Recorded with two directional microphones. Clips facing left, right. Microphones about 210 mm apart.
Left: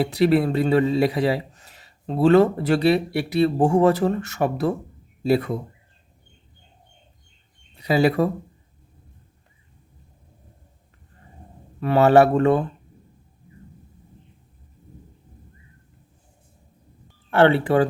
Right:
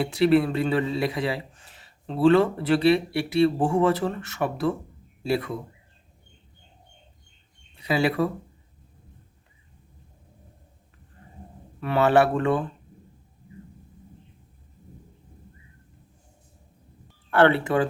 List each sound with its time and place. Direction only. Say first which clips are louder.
0.0 s a man's voice: left 1 dB; 40° left (ahead or behind)
7.8 s speech: left 4 dB; 40° left (ahead or behind)
11.8 s a man's voice: left 5 dB; 40° left (ahead or behind)
17.3 s a man's voice: left 3 dB; 30° left (ahead or behind)